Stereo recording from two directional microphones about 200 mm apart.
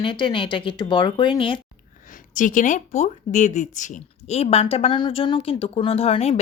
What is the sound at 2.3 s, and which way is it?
Speech, 40° left (ahead or behind).